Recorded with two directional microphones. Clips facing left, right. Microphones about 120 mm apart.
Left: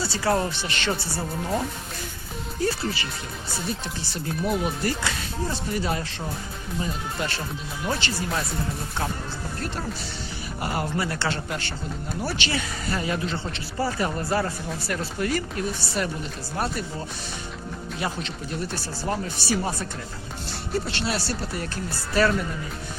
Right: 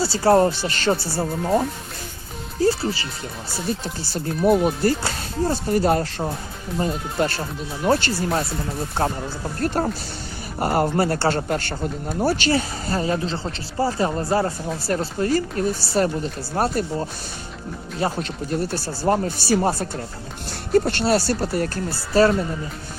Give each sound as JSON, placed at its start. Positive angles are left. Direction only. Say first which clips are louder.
{"t": 0.0, "sound": "speech", "louder": "right 8 dB", "side_deg": -35}
{"t": 9.6, "sound": "speech", "louder": "right 11 dB", "side_deg": -50}
{"t": 18.0, "sound": "speech", "louder": "right 7 dB", "side_deg": -40}
{"t": 22.1, "sound": "speech", "louder": "right 5 dB", "side_deg": -35}